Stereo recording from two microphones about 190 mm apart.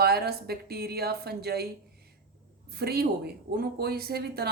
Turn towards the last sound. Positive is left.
turn(degrees=-55)  # may be behind; listen again after turning